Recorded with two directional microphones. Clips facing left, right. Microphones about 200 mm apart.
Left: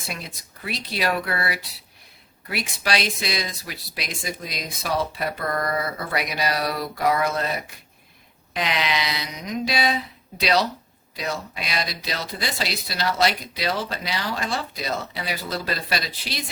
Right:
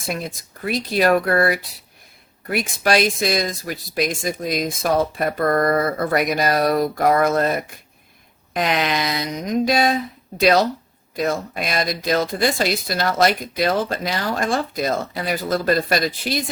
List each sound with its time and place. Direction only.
0.1 s speech: 45° right (ahead or behind)